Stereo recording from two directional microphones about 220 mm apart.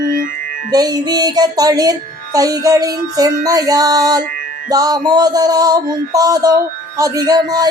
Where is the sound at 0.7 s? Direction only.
15° right (ahead or behind).